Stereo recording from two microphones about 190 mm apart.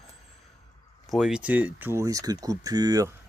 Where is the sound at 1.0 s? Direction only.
Centre (ahead or behind).